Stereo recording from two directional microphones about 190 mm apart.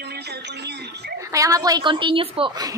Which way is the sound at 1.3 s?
15° right (ahead or behind).